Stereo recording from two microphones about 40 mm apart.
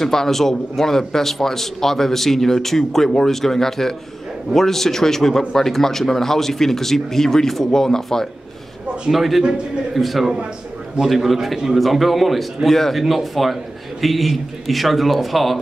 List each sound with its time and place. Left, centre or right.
0.0 s a man's voice: centre
9.1 s a man's voice: centre